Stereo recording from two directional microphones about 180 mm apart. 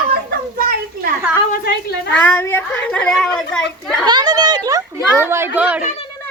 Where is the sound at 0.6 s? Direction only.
55° right (ahead or behind).